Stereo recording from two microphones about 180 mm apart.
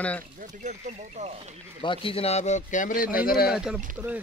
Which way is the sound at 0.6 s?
45° right (ahead or behind).